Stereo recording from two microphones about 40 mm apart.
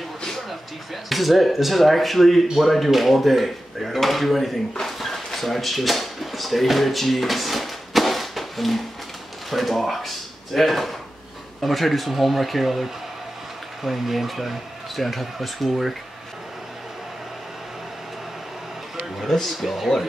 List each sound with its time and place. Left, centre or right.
1.0 s speech: centre
13.8 s speech: centre
18.9 s a sound: centre
19.5 s speech: centre